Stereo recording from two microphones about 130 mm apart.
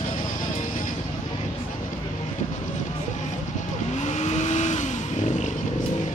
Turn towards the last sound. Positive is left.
turn(degrees=65)  # may be behind; listen again after turning